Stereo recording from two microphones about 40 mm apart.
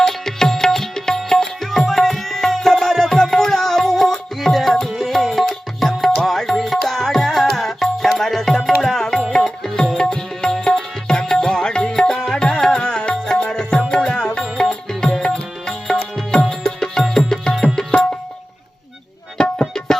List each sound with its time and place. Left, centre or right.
0.1 s music: centre
17.9 s music: left
19.4 s tabla: centre